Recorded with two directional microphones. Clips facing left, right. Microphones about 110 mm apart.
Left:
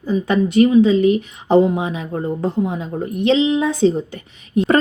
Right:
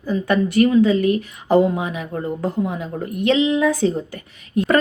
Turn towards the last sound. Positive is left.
turn(degrees=25)  # may be behind; listen again after turning